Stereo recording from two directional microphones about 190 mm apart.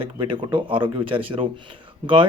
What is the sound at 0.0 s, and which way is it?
Speech, 25° right (ahead or behind).